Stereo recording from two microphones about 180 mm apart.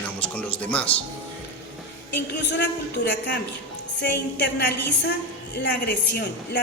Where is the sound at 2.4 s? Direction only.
75° left (ahead or behind).